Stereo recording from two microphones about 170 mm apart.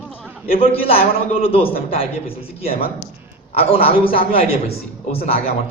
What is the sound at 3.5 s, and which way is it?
Speech, 35° left (ahead or behind).